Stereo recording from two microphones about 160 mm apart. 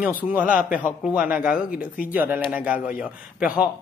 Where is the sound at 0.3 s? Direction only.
10° right (ahead or behind).